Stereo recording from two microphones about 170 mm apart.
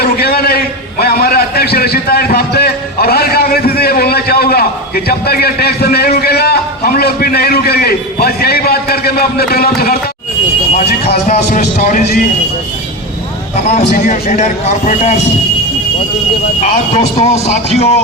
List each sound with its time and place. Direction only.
0.0 s a man's voice: 65° left (ahead or behind)
11.3 s speech: 45° left (ahead or behind)
11.8 s speech: 55° left (ahead or behind)
13.9 s speech: 45° left (ahead or behind)
16.6 s speech: 40° left (ahead or behind)